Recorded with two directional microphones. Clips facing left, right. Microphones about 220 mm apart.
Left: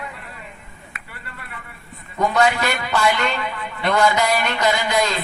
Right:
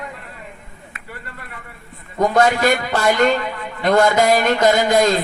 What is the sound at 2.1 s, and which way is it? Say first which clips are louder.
A man's voice: right 3 dB; 45° right (ahead or behind).